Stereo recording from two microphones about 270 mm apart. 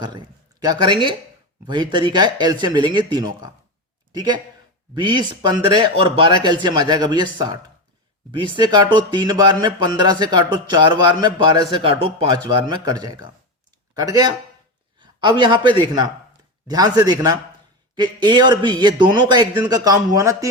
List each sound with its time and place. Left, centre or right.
0.6 s a man's voice: centre